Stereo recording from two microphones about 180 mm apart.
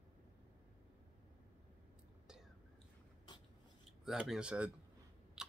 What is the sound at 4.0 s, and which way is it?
Speech, centre (ahead or behind).